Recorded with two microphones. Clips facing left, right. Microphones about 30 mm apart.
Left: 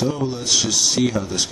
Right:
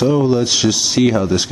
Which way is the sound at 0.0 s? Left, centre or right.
Centre.